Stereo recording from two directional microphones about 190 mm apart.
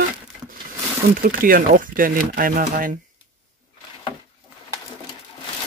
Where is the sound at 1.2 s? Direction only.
50° right (ahead or behind).